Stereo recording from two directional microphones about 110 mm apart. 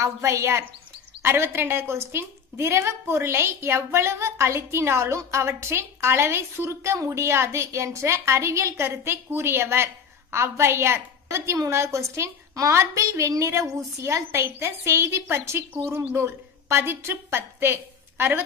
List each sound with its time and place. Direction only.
0.0 s a woman's voice: 25° right (ahead or behind)